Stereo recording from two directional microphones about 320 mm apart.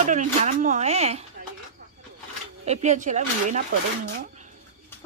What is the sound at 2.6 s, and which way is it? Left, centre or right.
Speech, right.